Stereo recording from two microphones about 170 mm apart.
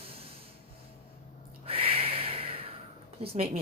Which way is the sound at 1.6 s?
35° right (ahead or behind).